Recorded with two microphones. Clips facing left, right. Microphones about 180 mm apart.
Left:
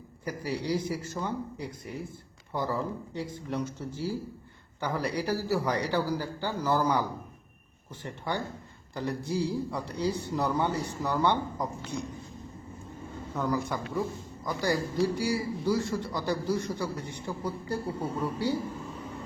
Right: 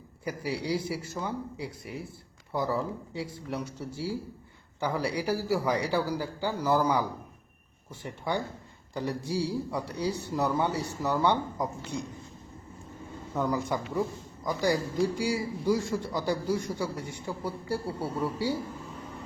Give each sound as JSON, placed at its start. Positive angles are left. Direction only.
{"t": 0.3, "sound": "a man's voice", "side_deg": -10}
{"t": 8.0, "sound": "a man's voice", "side_deg": -10}
{"t": 13.3, "sound": "a man's voice", "side_deg": -15}